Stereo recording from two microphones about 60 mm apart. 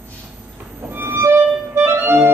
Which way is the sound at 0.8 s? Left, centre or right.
Right.